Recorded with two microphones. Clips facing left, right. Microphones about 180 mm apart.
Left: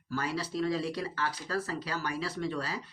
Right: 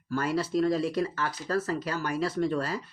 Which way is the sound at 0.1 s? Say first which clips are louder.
Right 6 dB; 50° right (ahead or behind).